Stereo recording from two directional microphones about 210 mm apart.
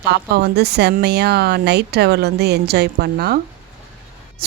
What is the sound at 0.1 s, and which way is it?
Speech, 50° right (ahead or behind).